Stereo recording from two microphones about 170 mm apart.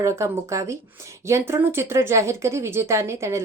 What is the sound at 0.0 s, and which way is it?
Speech, 15° right (ahead or behind).